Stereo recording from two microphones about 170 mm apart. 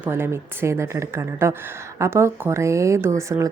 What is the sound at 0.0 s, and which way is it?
A woman's voice, 15° right (ahead or behind).